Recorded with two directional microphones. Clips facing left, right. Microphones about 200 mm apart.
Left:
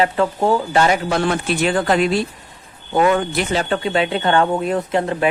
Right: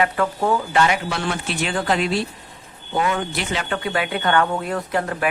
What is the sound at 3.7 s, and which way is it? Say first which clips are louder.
Speech: left 3 dB; 25° left (ahead or behind).